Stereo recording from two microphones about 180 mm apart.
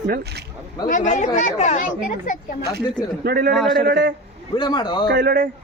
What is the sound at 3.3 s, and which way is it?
Speech, 60° right (ahead or behind).